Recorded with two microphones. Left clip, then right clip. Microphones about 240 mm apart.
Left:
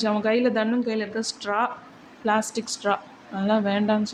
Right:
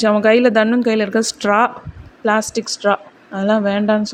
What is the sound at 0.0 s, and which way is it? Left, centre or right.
Speech, right.